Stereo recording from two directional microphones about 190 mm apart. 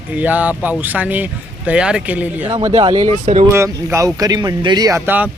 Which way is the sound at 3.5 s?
15° right (ahead or behind).